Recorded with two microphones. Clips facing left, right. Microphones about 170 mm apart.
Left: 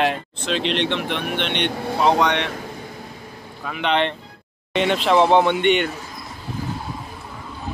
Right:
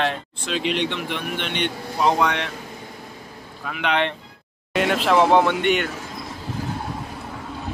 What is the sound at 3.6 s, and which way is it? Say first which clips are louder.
Speech: left 2 dB; 5° right (ahead or behind).